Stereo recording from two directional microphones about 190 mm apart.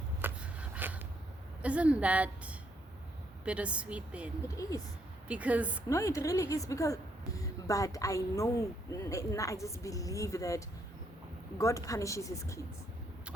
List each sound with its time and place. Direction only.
0.2 s a sound: 10° right (ahead or behind)
1.6 s a woman's voice: 5° right (ahead or behind)
5.3 s speech: 5° right (ahead or behind)
5.9 s a woman's voice: 15° left (ahead or behind)